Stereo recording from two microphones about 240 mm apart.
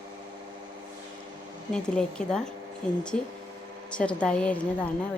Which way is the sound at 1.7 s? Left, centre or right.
Centre.